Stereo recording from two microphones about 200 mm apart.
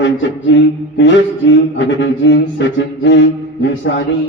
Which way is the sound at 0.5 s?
65° left (ahead or behind).